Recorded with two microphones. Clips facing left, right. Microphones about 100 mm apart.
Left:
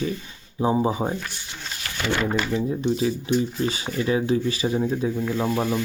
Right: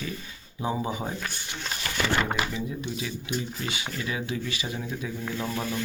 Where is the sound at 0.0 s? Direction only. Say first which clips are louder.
Left 8 dB; 30° left (ahead or behind).